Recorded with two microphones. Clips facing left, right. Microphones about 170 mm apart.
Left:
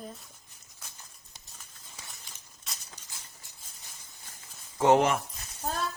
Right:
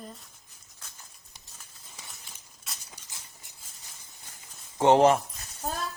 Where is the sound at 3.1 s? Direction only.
20° right (ahead or behind).